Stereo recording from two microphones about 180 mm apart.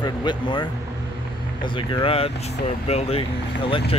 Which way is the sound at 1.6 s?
25° left (ahead or behind).